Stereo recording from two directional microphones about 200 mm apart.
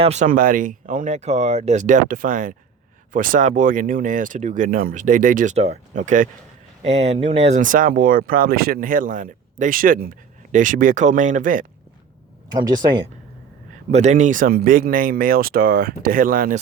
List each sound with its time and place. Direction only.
0.0 s speech: 35° right (ahead or behind)
12.5 s speech: 20° right (ahead or behind)
13.9 s speech: 35° right (ahead or behind)